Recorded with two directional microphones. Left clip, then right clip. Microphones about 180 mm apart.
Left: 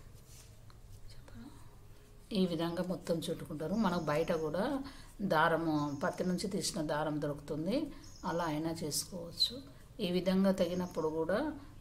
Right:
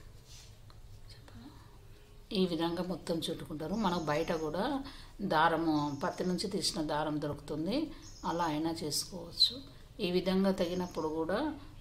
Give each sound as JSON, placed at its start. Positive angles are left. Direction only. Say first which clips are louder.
{"t": 2.2, "sound": "speech", "louder": "right 2 dB", "side_deg": 10}